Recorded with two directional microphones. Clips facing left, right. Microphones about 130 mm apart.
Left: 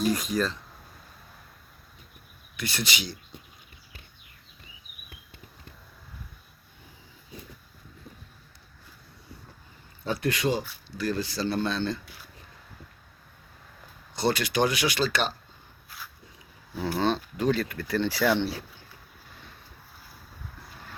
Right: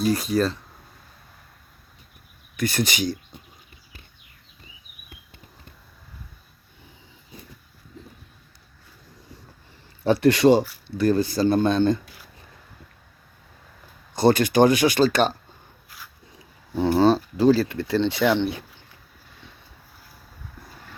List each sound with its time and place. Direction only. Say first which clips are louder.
0.0 s speech: right 5 dB; 35° right (ahead or behind)
2.6 s speech: right 8 dB; 45° right (ahead or behind)
10.0 s speech: right 11 dB; 70° right (ahead or behind)
10.6 s speech: right 10 dB; 55° right (ahead or behind)
14.2 s speech: right 8 dB; 45° right (ahead or behind)
16.7 s speech: right 9 dB; 30° right (ahead or behind)